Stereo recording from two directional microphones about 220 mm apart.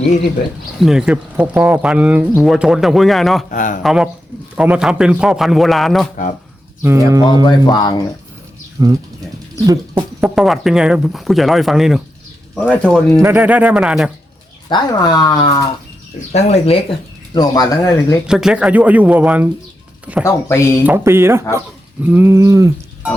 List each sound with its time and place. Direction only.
0.8 s speech: centre (ahead or behind)
3.5 s speech: 35° left (ahead or behind)
3.8 s speech: 5° right (ahead or behind)
6.8 s speech: 15° right (ahead or behind)
7.4 s speech: 20° left (ahead or behind)
8.8 s speech: 15° right (ahead or behind); by 13.2 s 5° left (ahead or behind)
13.2 s speech: 10° right (ahead or behind)
14.7 s speech: 20° left (ahead or behind)
17.3 s speech: 15° left (ahead or behind)
18.3 s speech: 5° right (ahead or behind)
20.2 s speech: 10° left (ahead or behind)
20.8 s speech: 10° right (ahead or behind)